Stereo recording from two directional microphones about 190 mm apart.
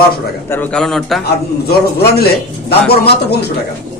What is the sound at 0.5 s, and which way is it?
Speech, 5° left (ahead or behind).